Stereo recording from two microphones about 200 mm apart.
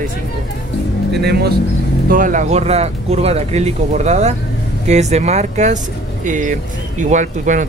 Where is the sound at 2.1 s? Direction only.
40° right (ahead or behind).